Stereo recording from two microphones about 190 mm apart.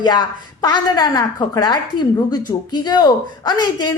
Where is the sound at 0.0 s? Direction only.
20° left (ahead or behind).